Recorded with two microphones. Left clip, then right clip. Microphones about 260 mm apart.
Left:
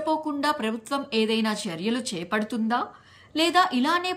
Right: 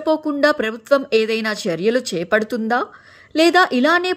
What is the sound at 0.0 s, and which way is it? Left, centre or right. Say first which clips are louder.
A woman's voice: right 8 dB; centre.